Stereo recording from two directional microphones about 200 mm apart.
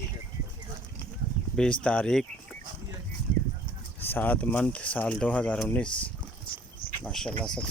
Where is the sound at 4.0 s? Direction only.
10° left (ahead or behind).